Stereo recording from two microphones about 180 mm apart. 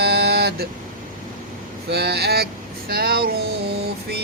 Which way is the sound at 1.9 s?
65° right (ahead or behind).